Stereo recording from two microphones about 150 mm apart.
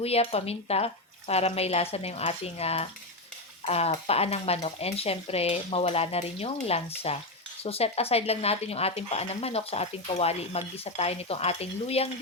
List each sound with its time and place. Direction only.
0.0 s stir: 40° left (ahead or behind)
1.3 s speech: 45° left (ahead or behind)
3.7 s stir: 40° left (ahead or behind)
7.6 s speech: 40° left (ahead or behind)